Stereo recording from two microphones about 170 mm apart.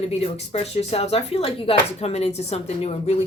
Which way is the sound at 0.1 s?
35° left (ahead or behind).